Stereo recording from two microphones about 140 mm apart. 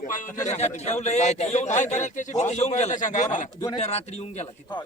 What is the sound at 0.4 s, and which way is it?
A man's voice, 55° left (ahead or behind).